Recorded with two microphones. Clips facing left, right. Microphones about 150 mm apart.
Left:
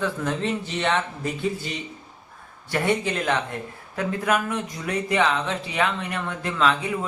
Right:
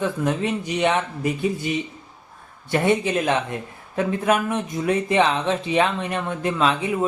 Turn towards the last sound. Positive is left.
turn(degrees=-20)  # may be behind; listen again after turning